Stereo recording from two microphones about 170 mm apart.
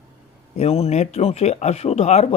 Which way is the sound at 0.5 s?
40° left (ahead or behind).